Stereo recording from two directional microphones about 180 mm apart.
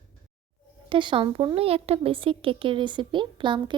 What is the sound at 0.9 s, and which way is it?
Speech, 25° right (ahead or behind).